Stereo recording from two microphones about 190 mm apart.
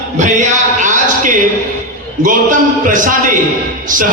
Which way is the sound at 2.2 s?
45° right (ahead or behind).